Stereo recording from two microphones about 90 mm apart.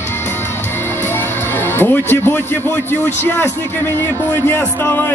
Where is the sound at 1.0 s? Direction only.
25° left (ahead or behind).